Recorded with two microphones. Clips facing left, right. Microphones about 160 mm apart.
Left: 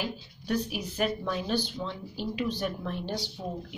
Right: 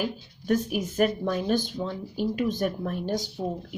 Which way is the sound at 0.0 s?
45° right (ahead or behind).